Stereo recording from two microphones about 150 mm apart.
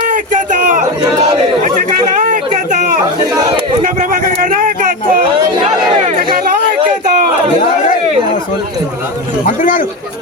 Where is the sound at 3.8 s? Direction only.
60° right (ahead or behind).